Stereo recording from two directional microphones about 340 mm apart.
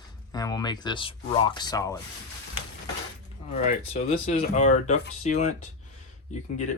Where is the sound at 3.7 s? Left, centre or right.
Centre.